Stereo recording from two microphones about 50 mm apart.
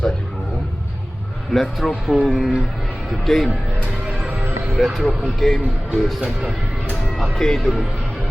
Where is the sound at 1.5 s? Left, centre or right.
Centre.